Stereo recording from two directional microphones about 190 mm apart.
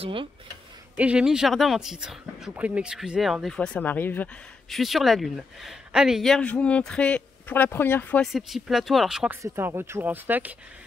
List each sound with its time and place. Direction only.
0.0 s speech: 25° right (ahead or behind)
0.9 s speech: 5° right (ahead or behind)
9.4 s speech: 15° right (ahead or behind)